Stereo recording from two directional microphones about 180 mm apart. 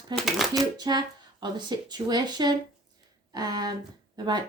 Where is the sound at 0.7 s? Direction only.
25° right (ahead or behind).